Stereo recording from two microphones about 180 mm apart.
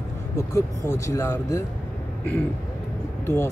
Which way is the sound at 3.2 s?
15° left (ahead or behind).